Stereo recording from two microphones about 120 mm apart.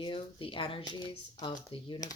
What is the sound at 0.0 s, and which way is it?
Speech, 50° left (ahead or behind).